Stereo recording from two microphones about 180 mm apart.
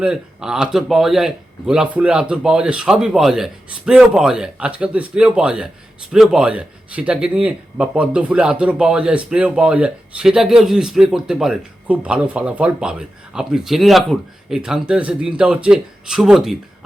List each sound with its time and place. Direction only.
0.0 s a man's voice: 5° right (ahead or behind)